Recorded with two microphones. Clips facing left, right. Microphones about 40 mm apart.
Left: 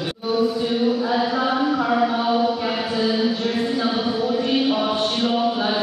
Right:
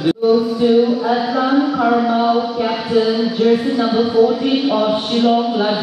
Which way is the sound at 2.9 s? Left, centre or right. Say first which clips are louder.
Right 7 dB; centre.